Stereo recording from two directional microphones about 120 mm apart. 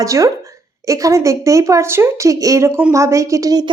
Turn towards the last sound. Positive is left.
turn(degrees=-35)  # may be behind; listen again after turning